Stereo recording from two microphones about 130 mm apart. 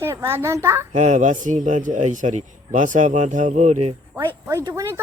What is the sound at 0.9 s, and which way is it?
A man's voice, 65° right (ahead or behind).